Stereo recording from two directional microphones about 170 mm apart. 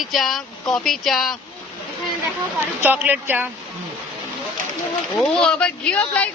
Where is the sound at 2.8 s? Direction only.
10° right (ahead or behind).